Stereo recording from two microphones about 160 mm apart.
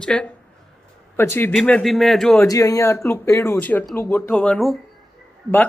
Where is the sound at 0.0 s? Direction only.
5° left (ahead or behind).